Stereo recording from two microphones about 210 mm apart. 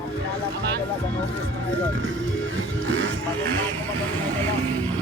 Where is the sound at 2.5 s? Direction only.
60° right (ahead or behind).